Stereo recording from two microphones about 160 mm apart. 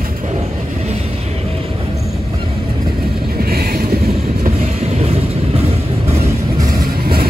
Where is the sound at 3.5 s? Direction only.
70° right (ahead or behind).